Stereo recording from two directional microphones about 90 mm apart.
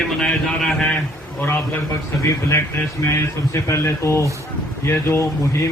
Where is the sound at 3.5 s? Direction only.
30° left (ahead or behind).